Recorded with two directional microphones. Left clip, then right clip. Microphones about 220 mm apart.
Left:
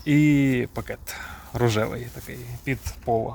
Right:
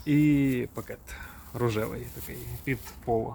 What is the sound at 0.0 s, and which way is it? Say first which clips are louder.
Speech: left 4 dB; 50° left (ahead or behind).